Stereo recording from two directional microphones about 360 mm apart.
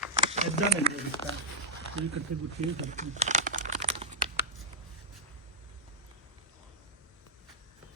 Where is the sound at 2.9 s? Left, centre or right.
Centre.